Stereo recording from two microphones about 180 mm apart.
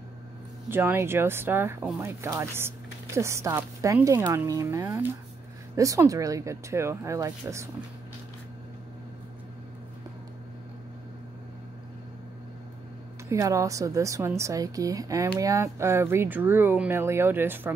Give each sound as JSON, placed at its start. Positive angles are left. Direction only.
{"t": 0.7, "sound": "a woman's voice", "side_deg": -10}
{"t": 13.3, "sound": "a woman's voice", "side_deg": -15}